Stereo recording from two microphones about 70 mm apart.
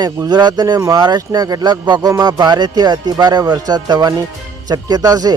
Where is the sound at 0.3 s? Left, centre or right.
Right.